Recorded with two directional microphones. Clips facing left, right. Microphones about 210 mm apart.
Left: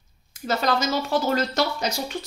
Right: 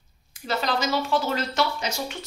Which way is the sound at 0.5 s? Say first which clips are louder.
Left 2 dB; 45° left (ahead or behind).